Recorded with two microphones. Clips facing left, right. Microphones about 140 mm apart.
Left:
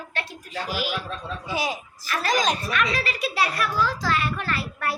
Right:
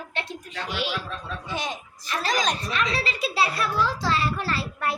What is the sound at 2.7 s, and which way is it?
A child's voice, 30° right (ahead or behind).